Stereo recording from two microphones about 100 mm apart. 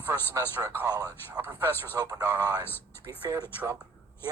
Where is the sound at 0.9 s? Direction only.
35° right (ahead or behind).